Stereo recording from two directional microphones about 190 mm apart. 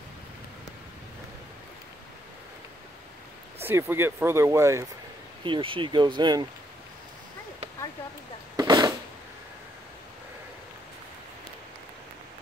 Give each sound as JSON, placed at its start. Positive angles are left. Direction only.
{"t": 3.6, "sound": "speech", "side_deg": -10}
{"t": 5.4, "sound": "speech", "side_deg": -25}
{"t": 8.5, "sound": "a sound", "side_deg": -20}